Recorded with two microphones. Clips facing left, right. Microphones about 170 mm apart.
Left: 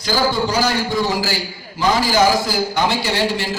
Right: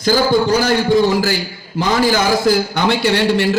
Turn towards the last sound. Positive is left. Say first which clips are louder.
# right 5 dB
turn(degrees=-60)  # may be behind; listen again after turning